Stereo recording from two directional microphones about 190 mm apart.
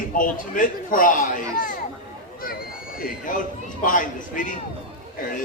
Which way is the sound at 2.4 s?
50° left (ahead or behind).